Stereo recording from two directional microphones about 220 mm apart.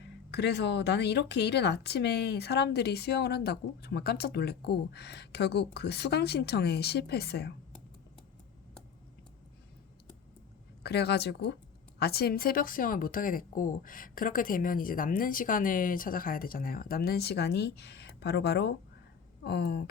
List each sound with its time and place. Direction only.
0.3 s speech: 50° left (ahead or behind)
10.8 s speech: 50° left (ahead or behind)